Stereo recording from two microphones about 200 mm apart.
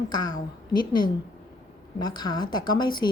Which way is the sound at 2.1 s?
20° left (ahead or behind).